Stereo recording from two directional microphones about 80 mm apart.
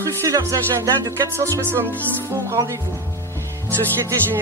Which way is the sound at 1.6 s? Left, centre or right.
Right.